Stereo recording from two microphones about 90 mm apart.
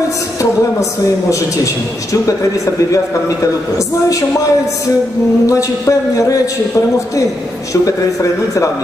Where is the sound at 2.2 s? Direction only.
40° left (ahead or behind).